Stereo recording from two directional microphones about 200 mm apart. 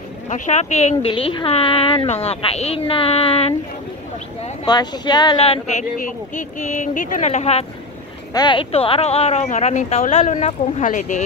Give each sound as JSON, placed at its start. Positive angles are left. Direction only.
{"t": 0.3, "sound": "speech", "side_deg": 35}
{"t": 4.6, "sound": "speech", "side_deg": 20}
{"t": 8.3, "sound": "speech", "side_deg": 20}